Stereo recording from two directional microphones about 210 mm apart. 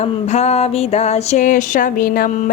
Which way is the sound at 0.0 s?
30° left (ahead or behind).